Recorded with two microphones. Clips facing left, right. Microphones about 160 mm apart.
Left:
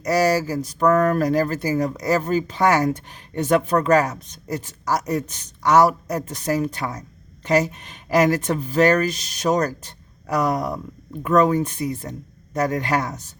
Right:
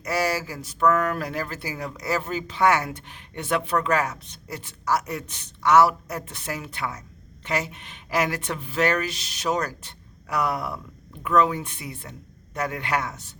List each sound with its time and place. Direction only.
0.0 s speech: 40° left (ahead or behind)